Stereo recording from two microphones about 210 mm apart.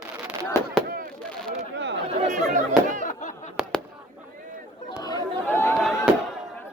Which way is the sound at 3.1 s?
35° left (ahead or behind).